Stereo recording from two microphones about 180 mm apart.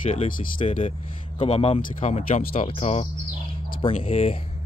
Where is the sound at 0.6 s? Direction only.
35° left (ahead or behind).